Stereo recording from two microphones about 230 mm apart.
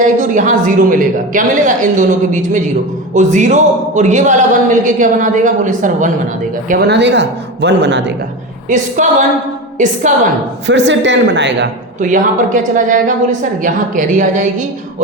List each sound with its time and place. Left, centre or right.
0.0 s a man's voice: right
6.7 s a woman's voice: right
8.7 s a man's voice: right
10.7 s a woman's voice: right
11.9 s a man's voice: right